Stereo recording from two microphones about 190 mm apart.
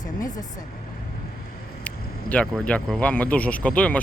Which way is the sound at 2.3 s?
5° left (ahead or behind).